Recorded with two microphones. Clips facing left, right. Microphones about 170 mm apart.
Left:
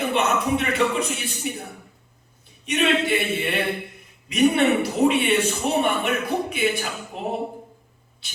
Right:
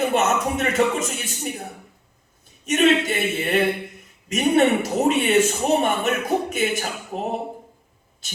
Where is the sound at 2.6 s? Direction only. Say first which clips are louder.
Right 3 dB; 45° right (ahead or behind).